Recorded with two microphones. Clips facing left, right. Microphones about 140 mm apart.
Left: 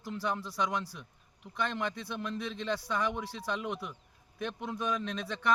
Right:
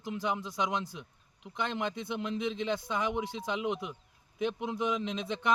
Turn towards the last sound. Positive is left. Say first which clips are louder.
# right 2 dB
turn(degrees=-20)  # may be behind; listen again after turning